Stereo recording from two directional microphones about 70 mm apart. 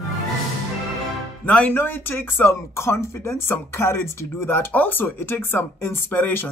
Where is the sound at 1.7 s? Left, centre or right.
Left.